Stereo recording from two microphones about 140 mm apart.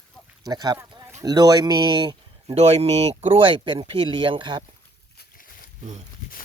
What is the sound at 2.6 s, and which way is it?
Speech, 50° right (ahead or behind).